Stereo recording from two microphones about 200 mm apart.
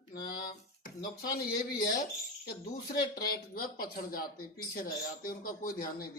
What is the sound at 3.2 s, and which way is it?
Speech, 50° left (ahead or behind).